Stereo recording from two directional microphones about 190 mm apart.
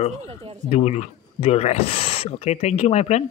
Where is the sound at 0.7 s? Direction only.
35° left (ahead or behind).